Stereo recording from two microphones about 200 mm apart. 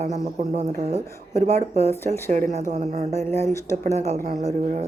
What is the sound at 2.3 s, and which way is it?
Speech, 35° right (ahead or behind).